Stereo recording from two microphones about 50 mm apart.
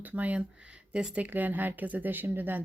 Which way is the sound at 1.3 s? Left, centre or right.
Right.